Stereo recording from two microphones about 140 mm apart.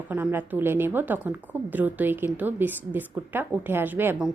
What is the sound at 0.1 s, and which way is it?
A woman's voice, 15° right (ahead or behind).